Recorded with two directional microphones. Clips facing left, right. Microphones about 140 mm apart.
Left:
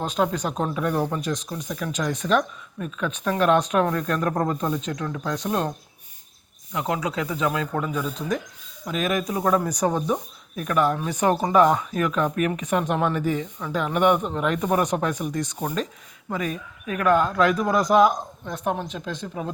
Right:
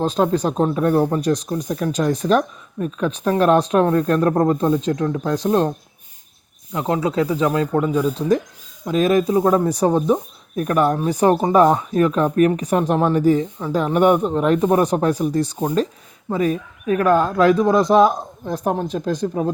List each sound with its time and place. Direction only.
0.0 s speech: 30° right (ahead or behind)
6.7 s speech: 30° right (ahead or behind)